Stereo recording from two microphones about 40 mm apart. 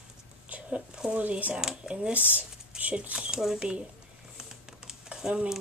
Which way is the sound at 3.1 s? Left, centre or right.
Centre.